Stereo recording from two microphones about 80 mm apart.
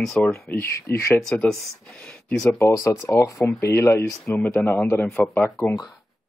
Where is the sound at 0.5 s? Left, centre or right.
Left.